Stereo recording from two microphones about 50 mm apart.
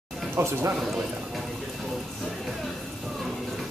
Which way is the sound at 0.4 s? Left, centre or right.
Right.